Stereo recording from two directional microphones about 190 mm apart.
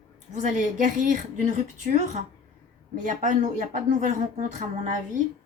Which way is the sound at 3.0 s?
40° right (ahead or behind).